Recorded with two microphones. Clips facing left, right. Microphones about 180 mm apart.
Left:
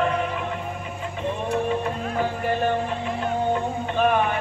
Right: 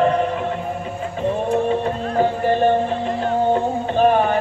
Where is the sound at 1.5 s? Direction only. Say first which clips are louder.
Right 3 dB; 30° right (ahead or behind).